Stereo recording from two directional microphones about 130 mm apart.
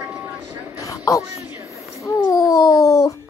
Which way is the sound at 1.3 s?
20° right (ahead or behind).